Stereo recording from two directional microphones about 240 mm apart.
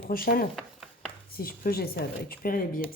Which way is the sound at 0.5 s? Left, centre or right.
Centre.